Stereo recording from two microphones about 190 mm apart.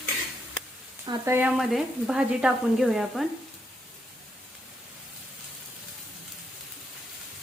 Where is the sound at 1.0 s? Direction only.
15° right (ahead or behind).